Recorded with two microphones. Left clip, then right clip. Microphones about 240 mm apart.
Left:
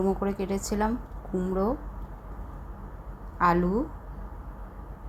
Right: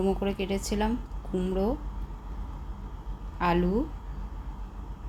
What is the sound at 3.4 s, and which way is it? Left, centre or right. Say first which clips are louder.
Speech: left 3 dB; centre.